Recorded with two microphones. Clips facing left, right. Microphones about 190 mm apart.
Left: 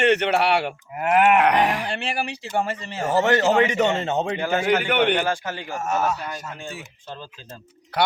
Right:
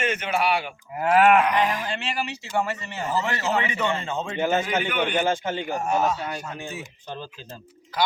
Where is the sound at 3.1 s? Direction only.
75° left (ahead or behind).